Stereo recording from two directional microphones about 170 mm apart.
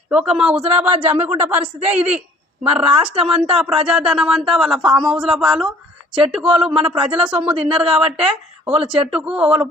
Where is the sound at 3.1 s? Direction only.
35° right (ahead or behind).